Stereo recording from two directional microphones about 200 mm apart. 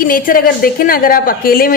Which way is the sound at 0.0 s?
45° left (ahead or behind).